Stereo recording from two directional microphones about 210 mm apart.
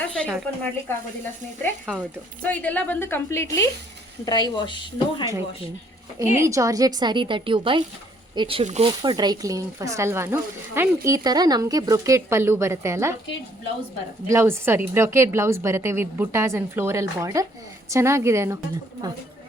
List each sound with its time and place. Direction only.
0.1 s speech: centre (ahead or behind)
2.4 s a woman's voice: 5° left (ahead or behind); by 5.2 s 20° left (ahead or behind)
6.1 s speech: 15° right (ahead or behind)
14.3 s speech: 10° right (ahead or behind)